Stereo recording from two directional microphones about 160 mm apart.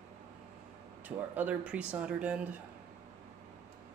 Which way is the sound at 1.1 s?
10° right (ahead or behind).